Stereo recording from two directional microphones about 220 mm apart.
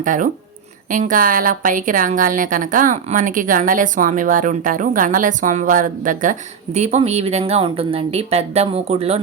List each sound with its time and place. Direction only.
0.0 s speech: 35° right (ahead or behind)